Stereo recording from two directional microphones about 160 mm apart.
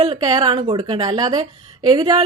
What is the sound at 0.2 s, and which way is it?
A woman's voice, 25° right (ahead or behind).